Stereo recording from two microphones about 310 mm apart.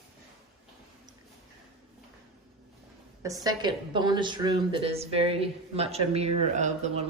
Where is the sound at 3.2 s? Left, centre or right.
Centre.